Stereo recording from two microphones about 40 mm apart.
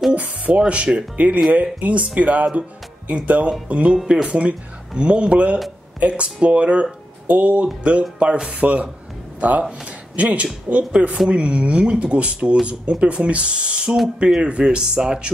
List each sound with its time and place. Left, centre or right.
0.1 s speech: right